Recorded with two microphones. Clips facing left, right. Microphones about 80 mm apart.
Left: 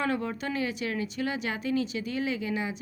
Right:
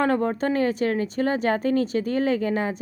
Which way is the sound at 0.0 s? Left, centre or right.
Right.